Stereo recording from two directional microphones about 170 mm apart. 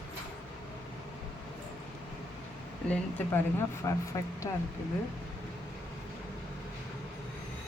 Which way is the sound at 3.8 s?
20° left (ahead or behind).